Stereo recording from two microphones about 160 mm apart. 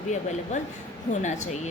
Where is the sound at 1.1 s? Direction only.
50° left (ahead or behind).